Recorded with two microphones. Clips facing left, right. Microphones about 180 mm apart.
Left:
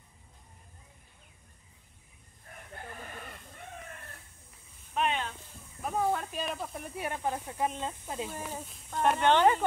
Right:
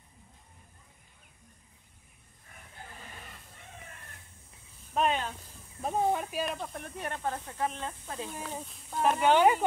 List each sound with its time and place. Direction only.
4.9 s snake: 40° right (ahead or behind)
5.8 s snake: 25° right (ahead or behind)
6.3 s speech: centre (ahead or behind); by 8.3 s 15° left (ahead or behind)
8.6 s speech: centre (ahead or behind)